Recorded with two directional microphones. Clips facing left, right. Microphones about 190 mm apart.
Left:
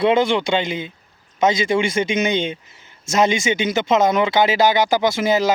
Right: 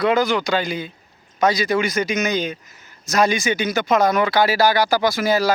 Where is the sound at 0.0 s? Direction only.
25° left (ahead or behind).